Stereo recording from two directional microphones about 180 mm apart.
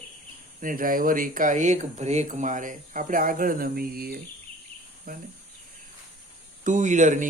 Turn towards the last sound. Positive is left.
turn(degrees=-45)  # may be behind; listen again after turning